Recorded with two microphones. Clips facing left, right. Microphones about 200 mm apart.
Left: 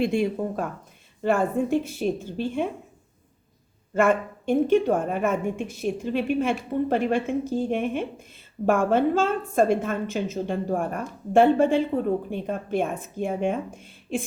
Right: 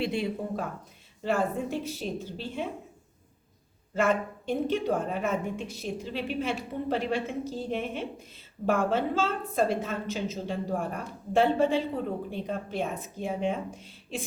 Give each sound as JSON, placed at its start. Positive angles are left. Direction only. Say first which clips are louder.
{"t": 0.0, "sound": "a woman's voice", "louder": "left 6 dB", "side_deg": 50}
{"t": 3.9, "sound": "a woman's voice", "louder": "left 5 dB", "side_deg": 50}